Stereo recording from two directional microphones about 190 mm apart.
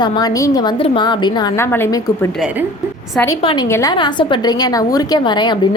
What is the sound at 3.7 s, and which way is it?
A woman's voice, 15° left (ahead or behind).